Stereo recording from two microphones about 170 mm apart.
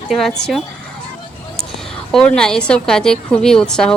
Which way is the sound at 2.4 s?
5° left (ahead or behind).